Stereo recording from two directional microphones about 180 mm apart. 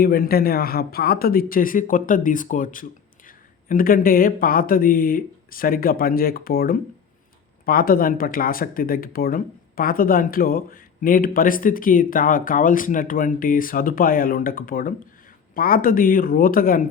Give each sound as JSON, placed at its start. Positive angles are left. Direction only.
{"t": 0.0, "sound": "speech", "side_deg": 55}